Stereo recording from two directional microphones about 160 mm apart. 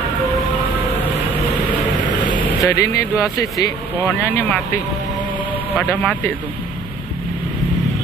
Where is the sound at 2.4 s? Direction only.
20° left (ahead or behind).